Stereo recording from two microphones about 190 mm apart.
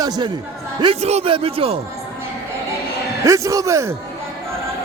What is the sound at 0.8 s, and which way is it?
Speech, 30° right (ahead or behind).